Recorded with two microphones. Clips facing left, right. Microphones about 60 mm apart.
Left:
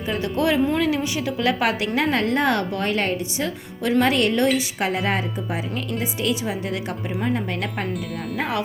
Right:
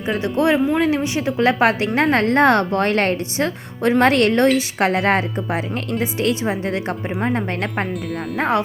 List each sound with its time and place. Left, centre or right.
0.2 s a woman's voice: right
2.0 s a woman's voice: right